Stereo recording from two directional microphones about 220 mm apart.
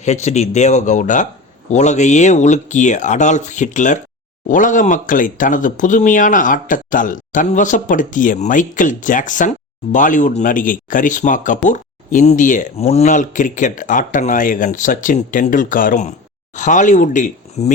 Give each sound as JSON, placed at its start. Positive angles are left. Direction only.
{"t": 0.0, "sound": "speech", "side_deg": 30}